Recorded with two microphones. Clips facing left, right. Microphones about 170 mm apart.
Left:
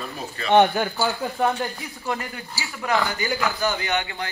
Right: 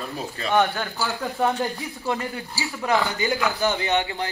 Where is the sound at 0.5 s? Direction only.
20° left (ahead or behind).